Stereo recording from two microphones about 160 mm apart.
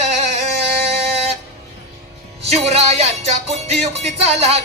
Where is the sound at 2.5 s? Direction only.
40° right (ahead or behind).